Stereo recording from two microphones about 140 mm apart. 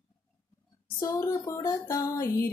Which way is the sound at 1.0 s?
25° left (ahead or behind).